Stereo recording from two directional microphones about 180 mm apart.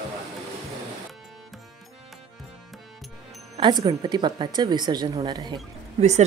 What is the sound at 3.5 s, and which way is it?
Speech, 25° right (ahead or behind).